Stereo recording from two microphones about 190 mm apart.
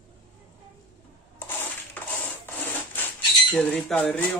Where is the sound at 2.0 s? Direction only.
10° left (ahead or behind).